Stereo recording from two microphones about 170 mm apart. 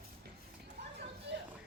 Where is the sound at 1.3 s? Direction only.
90° right.